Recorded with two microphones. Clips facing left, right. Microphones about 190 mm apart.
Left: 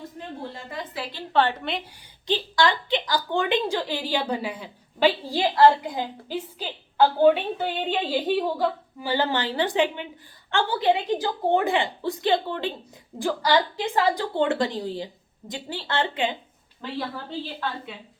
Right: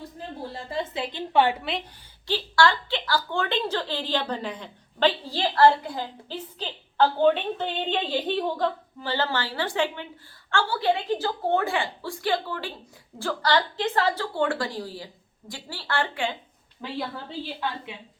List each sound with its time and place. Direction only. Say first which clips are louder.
0.2 s a sound: right 1 dB; 30° right (ahead or behind); by 1.5 s 15° right (ahead or behind)
1.6 s a woman's voice: left 1 dB; centre (ahead or behind)
2.2 s a woman's voice: even; 20° left (ahead or behind)
17.6 s a woman's voice: right 1 dB; 15° right (ahead or behind)